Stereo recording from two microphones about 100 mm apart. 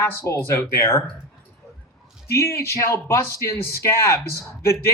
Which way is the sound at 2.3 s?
25° left (ahead or behind).